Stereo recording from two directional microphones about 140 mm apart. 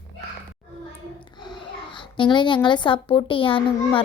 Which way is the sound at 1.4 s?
30° left (ahead or behind).